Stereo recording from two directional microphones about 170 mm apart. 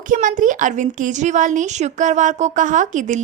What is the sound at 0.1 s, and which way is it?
A woman's voice, 50° right (ahead or behind).